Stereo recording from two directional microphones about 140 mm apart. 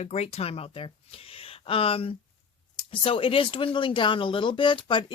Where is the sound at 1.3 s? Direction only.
40° left (ahead or behind).